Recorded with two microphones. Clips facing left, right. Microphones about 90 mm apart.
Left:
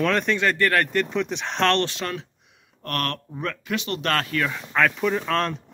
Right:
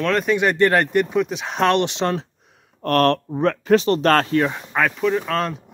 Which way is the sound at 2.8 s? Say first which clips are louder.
Right 11 dB; 35° right (ahead or behind).